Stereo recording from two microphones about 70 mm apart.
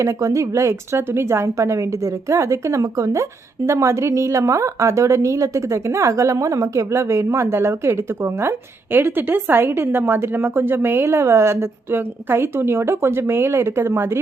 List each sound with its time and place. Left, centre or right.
0.0 s a woman's voice: right